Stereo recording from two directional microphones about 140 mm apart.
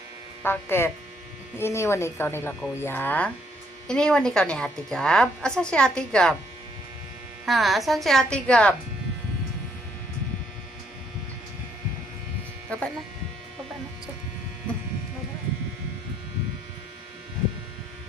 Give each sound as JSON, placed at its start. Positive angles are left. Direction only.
{"t": 0.4, "sound": "a woman's voice", "side_deg": 15}
{"t": 7.4, "sound": "a woman's voice", "side_deg": 0}
{"t": 12.7, "sound": "speech", "side_deg": 10}